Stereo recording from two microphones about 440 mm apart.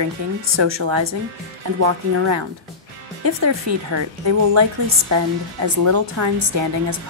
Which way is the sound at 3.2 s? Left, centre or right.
Right.